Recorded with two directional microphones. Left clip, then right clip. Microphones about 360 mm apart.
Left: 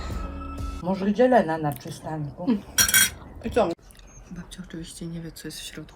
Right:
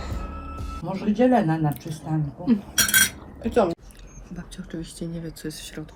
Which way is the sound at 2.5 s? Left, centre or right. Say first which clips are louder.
Right 1 dB; centre.